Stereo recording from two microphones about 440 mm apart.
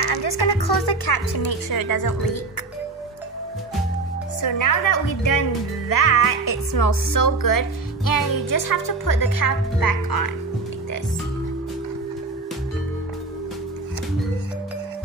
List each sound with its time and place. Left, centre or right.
0.0 s a woman's voice: left
4.4 s a woman's voice: left